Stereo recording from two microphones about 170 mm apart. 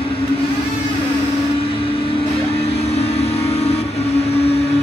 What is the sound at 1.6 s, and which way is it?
Vehicle, 35° left (ahead or behind).